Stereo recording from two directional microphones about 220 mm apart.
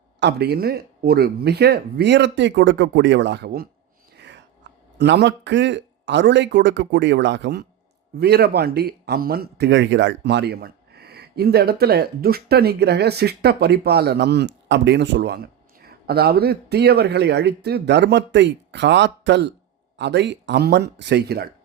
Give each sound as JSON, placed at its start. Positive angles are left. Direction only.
{"t": 0.2, "sound": "speech", "side_deg": -50}